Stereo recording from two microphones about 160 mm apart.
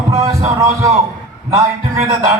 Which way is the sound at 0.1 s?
20° right (ahead or behind).